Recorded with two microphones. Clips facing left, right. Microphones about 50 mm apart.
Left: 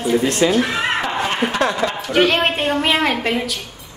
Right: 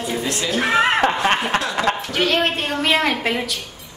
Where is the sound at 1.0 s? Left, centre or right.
Right.